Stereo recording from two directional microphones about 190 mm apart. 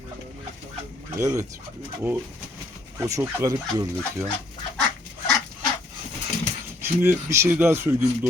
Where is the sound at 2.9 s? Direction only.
15° right (ahead or behind).